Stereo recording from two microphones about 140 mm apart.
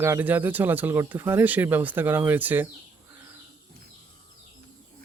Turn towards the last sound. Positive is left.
turn(degrees=-20)  # may be behind; listen again after turning